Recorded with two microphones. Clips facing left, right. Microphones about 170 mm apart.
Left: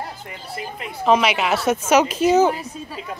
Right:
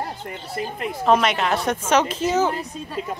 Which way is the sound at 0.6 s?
45° right (ahead or behind).